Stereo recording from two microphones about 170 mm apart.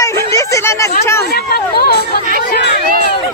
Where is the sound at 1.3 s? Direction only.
65° left (ahead or behind).